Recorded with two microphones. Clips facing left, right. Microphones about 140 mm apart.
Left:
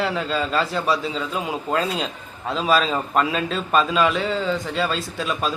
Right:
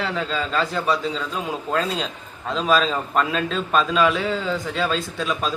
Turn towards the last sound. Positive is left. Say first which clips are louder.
# even
turn(degrees=0)  # may be behind; listen again after turning